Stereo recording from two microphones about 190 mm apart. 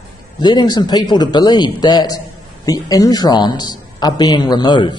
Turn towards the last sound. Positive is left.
turn(degrees=25)  # may be behind; listen again after turning